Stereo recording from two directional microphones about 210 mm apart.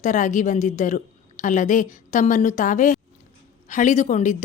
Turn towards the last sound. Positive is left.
turn(degrees=35)  # may be behind; listen again after turning